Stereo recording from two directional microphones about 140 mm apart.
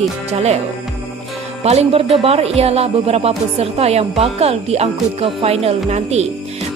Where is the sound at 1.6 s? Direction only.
50° right (ahead or behind).